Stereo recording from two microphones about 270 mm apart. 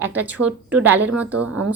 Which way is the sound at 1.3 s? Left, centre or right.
Right.